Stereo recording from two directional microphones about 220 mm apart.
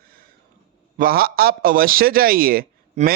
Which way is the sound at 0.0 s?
40° right (ahead or behind).